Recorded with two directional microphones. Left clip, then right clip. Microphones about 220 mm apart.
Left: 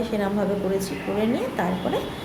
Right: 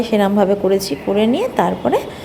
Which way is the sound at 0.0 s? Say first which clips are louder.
Right 10 dB; 35° right (ahead or behind).